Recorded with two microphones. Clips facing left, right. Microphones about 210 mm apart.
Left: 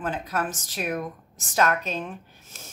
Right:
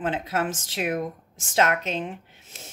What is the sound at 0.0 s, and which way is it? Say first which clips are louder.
Speech: right 2 dB; 25° right (ahead or behind).